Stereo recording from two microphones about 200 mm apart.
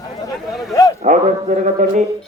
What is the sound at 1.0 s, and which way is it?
A man's voice, 35° right (ahead or behind).